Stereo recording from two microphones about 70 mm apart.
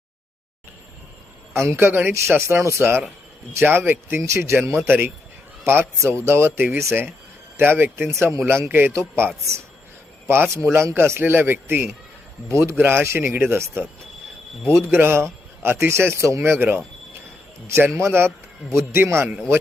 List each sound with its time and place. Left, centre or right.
1.5 s speech: right
2.1 s speech: right
14.9 s speech: right